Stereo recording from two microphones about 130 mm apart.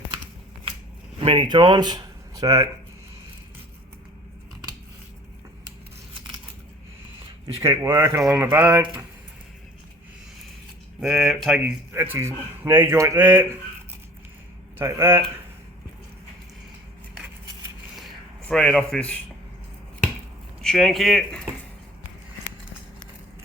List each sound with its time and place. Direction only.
1.2 s speech: 40° right (ahead or behind)
7.6 s speech: 20° right (ahead or behind)
11.0 s speech: 5° right (ahead or behind)
11.9 s speech: 20° right (ahead or behind)
14.8 s speech: 20° right (ahead or behind)
17.9 s a sound: centre (ahead or behind)
20.6 s speech: centre (ahead or behind)